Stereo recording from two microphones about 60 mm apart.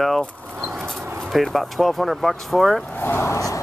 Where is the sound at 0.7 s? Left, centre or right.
Centre.